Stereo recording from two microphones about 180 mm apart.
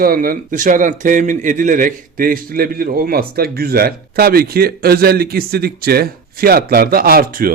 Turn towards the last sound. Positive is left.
turn(degrees=-50)  # may be behind; listen again after turning